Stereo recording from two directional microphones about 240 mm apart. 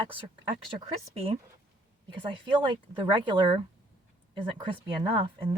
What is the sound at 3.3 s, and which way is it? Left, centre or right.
Speech, right.